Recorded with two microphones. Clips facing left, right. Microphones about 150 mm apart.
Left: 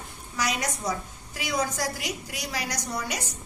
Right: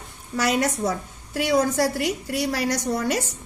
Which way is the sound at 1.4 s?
65° right (ahead or behind).